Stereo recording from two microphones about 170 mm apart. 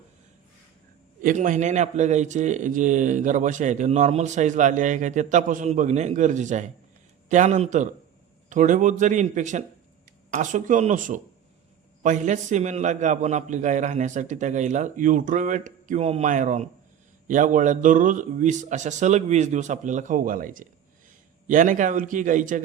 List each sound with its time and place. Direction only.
1.2 s a man's voice: 50° right (ahead or behind)